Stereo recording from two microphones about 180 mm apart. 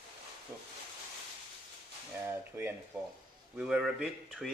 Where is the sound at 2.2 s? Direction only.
10° right (ahead or behind).